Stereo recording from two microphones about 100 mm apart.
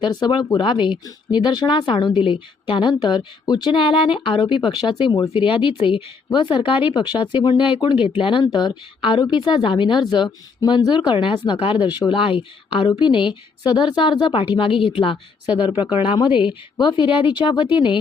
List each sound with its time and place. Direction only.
0.0 s a woman's voice: 45° left (ahead or behind)
8.5 s a woman's voice: 50° left (ahead or behind)
16.7 s a woman's voice: 50° left (ahead or behind)